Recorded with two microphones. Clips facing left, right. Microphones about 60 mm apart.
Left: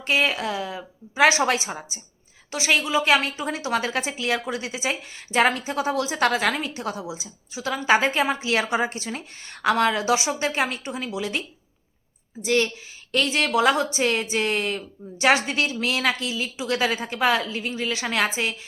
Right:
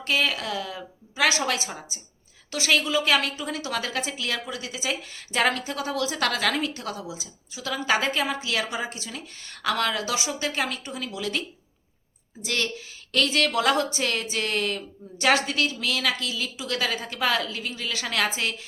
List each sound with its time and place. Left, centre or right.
0.0 s speech: left
12.5 s speech: centre